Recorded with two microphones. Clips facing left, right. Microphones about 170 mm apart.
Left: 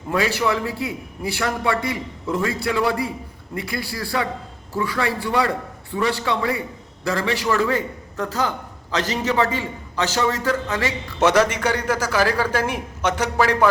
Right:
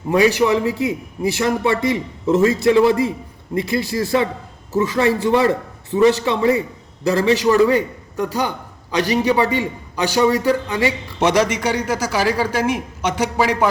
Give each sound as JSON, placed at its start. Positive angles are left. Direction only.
{"t": 0.1, "sound": "a man's voice", "side_deg": -20}